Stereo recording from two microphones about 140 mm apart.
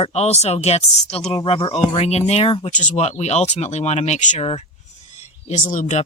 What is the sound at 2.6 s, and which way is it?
Speech, 55° left (ahead or behind).